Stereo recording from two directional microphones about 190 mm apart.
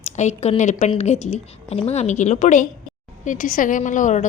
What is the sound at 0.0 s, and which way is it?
A woman's voice, 35° left (ahead or behind).